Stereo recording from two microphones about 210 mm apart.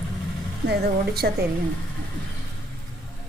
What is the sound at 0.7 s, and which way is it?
Speech, 50° right (ahead or behind).